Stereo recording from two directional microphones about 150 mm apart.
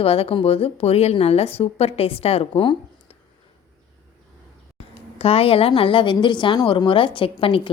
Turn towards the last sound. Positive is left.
turn(degrees=35)  # may be behind; listen again after turning